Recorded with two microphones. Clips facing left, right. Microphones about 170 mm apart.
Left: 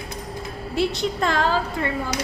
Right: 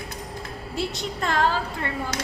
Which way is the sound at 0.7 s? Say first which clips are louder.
Left 7 dB; 90° left.